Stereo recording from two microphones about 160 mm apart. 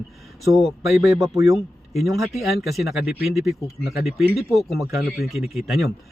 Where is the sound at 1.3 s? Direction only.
20° right (ahead or behind).